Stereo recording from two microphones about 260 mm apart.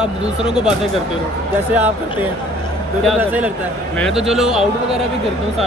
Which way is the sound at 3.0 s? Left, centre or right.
Centre.